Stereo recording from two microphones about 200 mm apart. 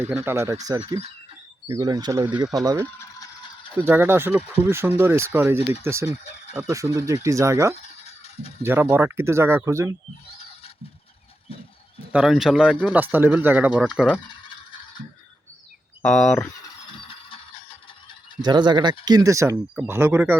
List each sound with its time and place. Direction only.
0.0 s speech: 10° right (ahead or behind)
1.6 s speech: 15° right (ahead or behind)
2.8 s mechanisms: 15° left (ahead or behind)
3.8 s speech: 10° right (ahead or behind)
6.1 s speech: 35° left (ahead or behind)
6.6 s speech: 15° right (ahead or behind)
7.8 s a sound: 30° left (ahead or behind)
8.6 s speech: 10° right (ahead or behind)
12.1 s speech: centre (ahead or behind)
16.0 s speech: 5° left (ahead or behind)
16.4 s mechanisms: 20° left (ahead or behind)
18.4 s speech: 20° right (ahead or behind)